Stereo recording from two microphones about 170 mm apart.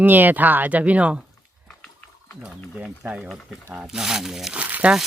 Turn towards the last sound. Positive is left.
turn(degrees=-10)  # may be behind; listen again after turning